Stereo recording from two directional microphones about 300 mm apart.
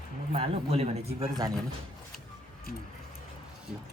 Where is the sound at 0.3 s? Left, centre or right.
Centre.